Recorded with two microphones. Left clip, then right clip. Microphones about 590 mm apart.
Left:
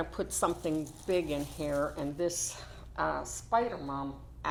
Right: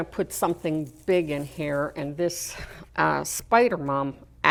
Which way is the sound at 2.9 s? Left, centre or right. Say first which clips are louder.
Right 9 dB; right.